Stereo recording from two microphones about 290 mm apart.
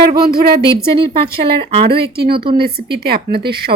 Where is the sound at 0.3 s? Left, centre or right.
Right.